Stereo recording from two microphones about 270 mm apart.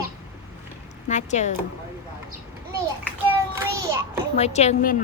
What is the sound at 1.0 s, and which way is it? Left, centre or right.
Speech, left.